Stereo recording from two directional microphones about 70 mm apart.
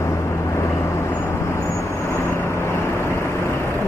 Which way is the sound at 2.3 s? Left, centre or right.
Left.